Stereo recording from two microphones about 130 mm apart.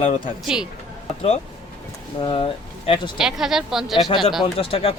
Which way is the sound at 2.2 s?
40° left (ahead or behind).